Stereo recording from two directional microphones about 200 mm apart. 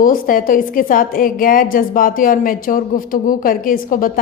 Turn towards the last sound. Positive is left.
turn(degrees=45)  # may be behind; listen again after turning